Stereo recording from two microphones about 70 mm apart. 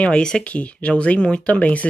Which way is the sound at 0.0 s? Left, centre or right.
Centre.